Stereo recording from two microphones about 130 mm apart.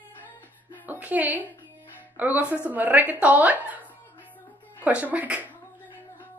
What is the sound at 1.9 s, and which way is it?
Music, 15° right (ahead or behind).